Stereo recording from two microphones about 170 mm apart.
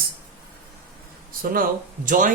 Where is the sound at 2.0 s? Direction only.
50° right (ahead or behind).